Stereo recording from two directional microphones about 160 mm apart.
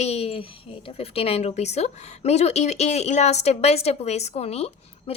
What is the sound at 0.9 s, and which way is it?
A woman's voice, 35° left (ahead or behind).